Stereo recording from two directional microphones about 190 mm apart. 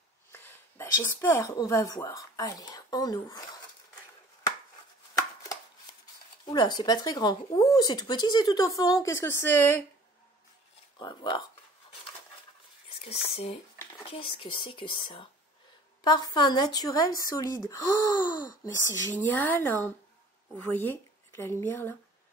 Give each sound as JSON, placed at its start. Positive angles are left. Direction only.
{"t": 0.3, "sound": "speech", "side_deg": 10}
{"t": 6.4, "sound": "speech", "side_deg": 25}
{"t": 11.0, "sound": "speech", "side_deg": 25}
{"t": 13.0, "sound": "speech", "side_deg": 30}